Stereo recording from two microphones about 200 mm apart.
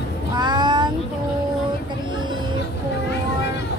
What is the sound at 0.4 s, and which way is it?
Meow, 20° right (ahead or behind).